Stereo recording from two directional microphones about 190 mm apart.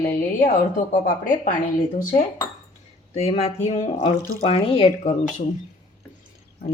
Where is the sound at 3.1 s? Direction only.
35° left (ahead or behind).